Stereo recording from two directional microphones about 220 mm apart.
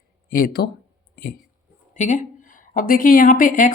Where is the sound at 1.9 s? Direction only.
35° left (ahead or behind).